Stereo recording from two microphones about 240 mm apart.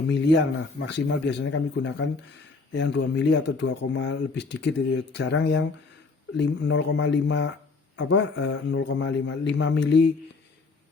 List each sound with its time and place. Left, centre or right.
0.1 s a man's voice: left